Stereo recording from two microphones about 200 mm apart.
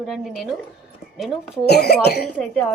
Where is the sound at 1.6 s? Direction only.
55° left (ahead or behind).